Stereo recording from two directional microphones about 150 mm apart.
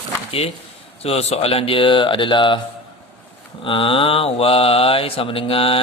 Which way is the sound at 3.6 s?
35° left (ahead or behind).